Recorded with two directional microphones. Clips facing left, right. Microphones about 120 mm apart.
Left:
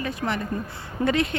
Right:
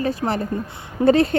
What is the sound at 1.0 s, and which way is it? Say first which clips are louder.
Speech: right 8 dB; 25° right (ahead or behind).